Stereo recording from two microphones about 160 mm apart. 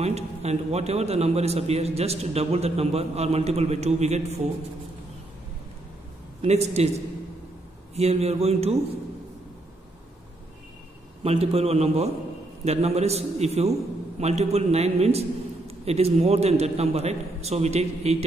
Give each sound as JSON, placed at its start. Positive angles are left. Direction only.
{"t": 0.0, "sound": "a man's voice", "side_deg": -40}
{"t": 6.4, "sound": "a man's voice", "side_deg": -45}
{"t": 7.9, "sound": "a man's voice", "side_deg": -40}
{"t": 11.2, "sound": "a man's voice", "side_deg": -40}